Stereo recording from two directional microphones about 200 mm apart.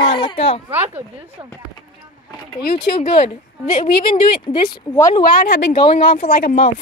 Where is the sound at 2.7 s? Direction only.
25° left (ahead or behind).